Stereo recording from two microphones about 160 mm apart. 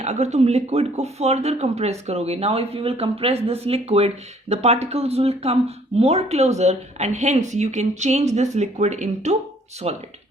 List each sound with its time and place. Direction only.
0.0 s speech: 45° right (ahead or behind)